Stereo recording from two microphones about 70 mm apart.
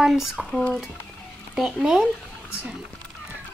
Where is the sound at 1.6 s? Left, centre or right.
Centre.